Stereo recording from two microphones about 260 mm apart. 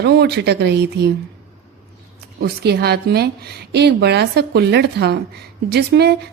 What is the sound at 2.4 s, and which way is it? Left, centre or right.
A woman's voice, right.